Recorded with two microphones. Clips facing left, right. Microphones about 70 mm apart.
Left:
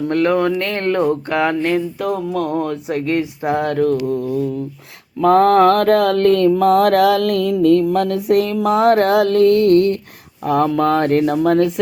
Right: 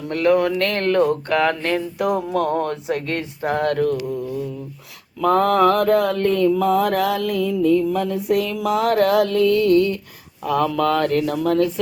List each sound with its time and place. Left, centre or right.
0.1 s speech: left
0.5 s speech: centre
2.0 s speech: centre
5.2 s speech: left
6.5 s mantra: left
8.4 s speech: left